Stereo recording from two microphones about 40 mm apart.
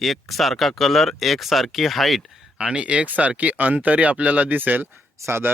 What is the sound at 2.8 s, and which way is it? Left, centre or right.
Speech, right.